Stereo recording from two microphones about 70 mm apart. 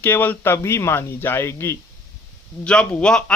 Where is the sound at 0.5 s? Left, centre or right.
Left.